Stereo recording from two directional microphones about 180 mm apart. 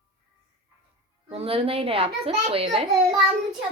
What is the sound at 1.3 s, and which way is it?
A woman's voice, 35° right (ahead or behind).